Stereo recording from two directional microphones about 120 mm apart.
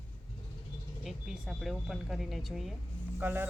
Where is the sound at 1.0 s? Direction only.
Centre (ahead or behind).